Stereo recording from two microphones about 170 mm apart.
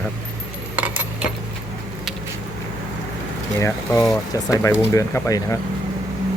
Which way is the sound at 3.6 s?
20° left (ahead or behind).